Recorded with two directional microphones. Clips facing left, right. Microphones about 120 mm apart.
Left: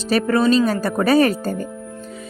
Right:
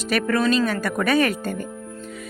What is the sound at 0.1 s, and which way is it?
Speech, 30° left (ahead or behind).